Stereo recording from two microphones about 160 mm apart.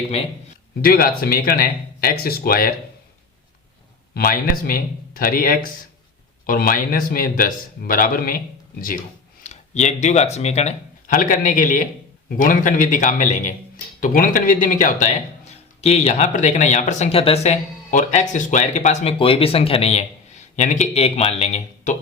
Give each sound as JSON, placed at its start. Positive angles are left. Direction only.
{"t": 0.8, "sound": "speech", "side_deg": 65}
{"t": 4.1, "sound": "speech", "side_deg": 65}
{"t": 9.4, "sound": "speech", "side_deg": 45}